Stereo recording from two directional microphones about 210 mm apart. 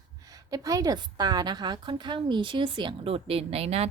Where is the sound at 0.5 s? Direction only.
15° right (ahead or behind).